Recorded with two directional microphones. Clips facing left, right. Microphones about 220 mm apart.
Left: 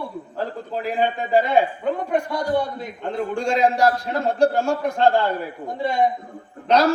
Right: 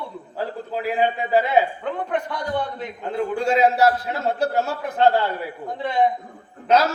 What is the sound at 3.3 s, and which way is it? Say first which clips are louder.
A man's voice: right 1 dB; 5° right (ahead or behind).